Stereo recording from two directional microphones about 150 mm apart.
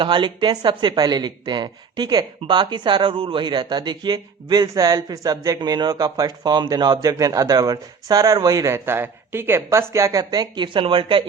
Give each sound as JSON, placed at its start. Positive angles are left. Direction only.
{"t": 0.0, "sound": "speech", "side_deg": -30}